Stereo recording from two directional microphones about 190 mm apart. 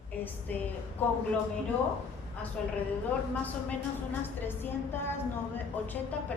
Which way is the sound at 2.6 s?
5° left (ahead or behind).